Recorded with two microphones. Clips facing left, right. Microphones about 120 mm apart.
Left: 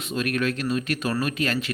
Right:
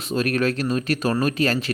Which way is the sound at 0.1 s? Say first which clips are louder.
Right 4 dB; 35° right (ahead or behind).